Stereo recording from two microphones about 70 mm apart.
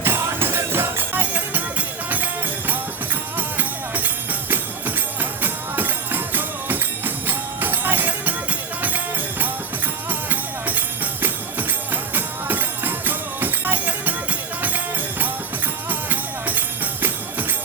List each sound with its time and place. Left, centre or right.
0.0 s music: right
10.1 s music: right
15.9 s music: right